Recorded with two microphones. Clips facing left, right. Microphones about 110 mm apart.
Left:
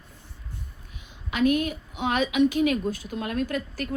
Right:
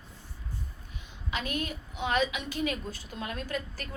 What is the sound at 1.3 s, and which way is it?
A woman's voice, 50° left (ahead or behind).